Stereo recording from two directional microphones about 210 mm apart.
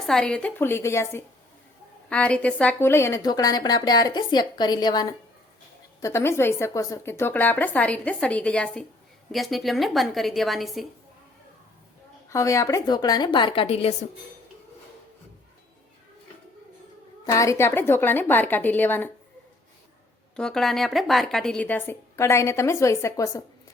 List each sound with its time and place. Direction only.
0.0 s a woman's voice: centre (ahead or behind)
12.3 s speech: 15° left (ahead or behind)
17.2 s a woman's voice: 15° left (ahead or behind)
20.3 s a woman's voice: centre (ahead or behind)